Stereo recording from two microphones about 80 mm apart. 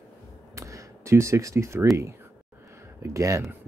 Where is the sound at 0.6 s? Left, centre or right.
Right.